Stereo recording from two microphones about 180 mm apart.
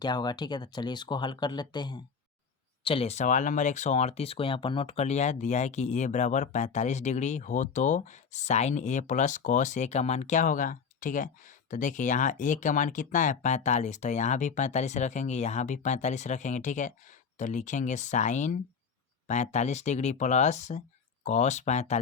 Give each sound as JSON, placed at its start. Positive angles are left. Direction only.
{"t": 0.0, "sound": "speech", "side_deg": 25}